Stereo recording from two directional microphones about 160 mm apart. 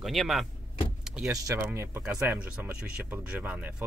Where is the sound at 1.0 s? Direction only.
5° right (ahead or behind).